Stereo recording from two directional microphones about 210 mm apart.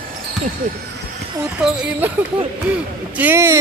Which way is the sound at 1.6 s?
Centre (ahead or behind).